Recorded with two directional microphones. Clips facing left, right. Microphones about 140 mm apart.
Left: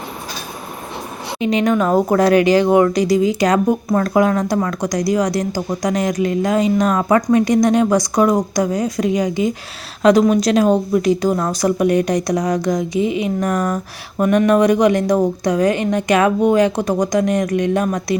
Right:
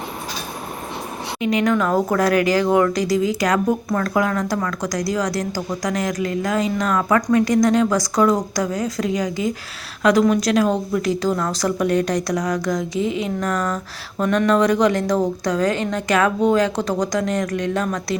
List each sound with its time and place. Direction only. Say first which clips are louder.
1.4 s speech: left 3 dB; 25° left (ahead or behind)